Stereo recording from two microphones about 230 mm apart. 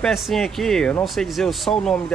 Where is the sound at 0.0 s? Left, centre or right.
Centre.